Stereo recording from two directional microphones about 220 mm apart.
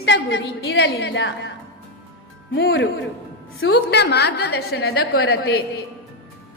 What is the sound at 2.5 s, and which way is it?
A woman's voice, 55° left (ahead or behind).